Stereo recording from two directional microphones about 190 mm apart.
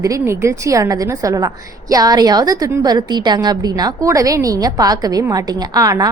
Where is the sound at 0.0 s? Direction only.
15° right (ahead or behind).